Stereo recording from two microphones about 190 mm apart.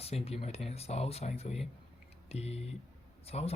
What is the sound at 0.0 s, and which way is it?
Speech, 30° left (ahead or behind).